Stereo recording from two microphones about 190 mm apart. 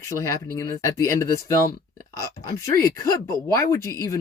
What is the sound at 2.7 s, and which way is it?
Speech, 15° left (ahead or behind).